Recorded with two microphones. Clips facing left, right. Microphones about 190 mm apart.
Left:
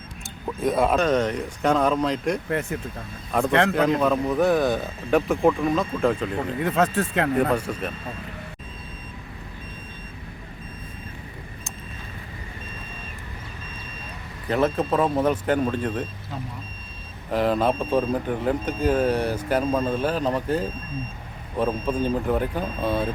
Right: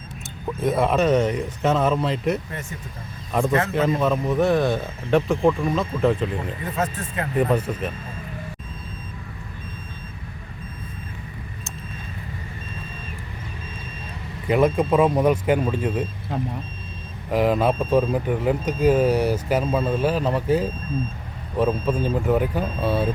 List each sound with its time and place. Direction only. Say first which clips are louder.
0.4 s a man's voice: even; centre (ahead or behind)
2.5 s speech: left 8 dB; 65° left (ahead or behind)
3.3 s a man's voice: left 1 dB; 5° right (ahead or behind)
6.6 s speech: left 8 dB; 75° left (ahead or behind)
7.7 s a man's voice: right 2 dB; 5° right (ahead or behind)
14.4 s speech: right 3 dB; 10° right (ahead or behind)
16.3 s speech: right 9 dB; 55° right (ahead or behind)
17.3 s a man's voice: right 2 dB; 10° right (ahead or behind)